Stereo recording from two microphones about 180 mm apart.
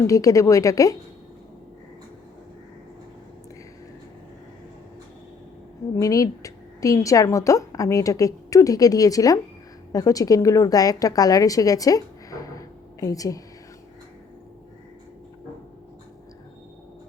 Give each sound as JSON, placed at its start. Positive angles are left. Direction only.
{"t": 0.1, "sound": "speech", "side_deg": 20}
{"t": 6.0, "sound": "a woman's voice", "side_deg": 20}